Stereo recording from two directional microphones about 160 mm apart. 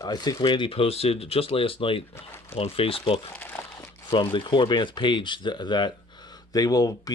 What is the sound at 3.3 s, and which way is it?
Crumpling, 15° left (ahead or behind).